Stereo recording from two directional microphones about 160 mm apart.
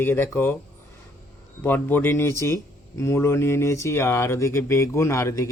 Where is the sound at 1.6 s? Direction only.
10° left (ahead or behind).